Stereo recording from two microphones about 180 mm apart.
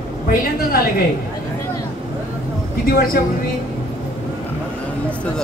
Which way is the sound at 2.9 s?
55° left (ahead or behind).